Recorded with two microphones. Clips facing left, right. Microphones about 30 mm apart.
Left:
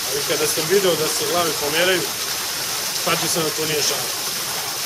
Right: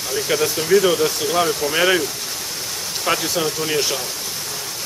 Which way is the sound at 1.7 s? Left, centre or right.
Centre.